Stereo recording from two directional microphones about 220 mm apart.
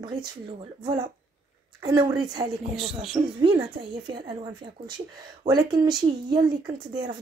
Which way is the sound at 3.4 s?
20° right (ahead or behind).